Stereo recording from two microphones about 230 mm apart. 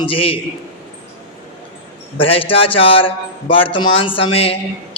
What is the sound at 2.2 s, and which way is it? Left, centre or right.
A man's voice, left.